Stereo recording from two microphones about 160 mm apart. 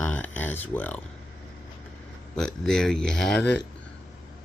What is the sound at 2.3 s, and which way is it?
Speech, 5° left (ahead or behind).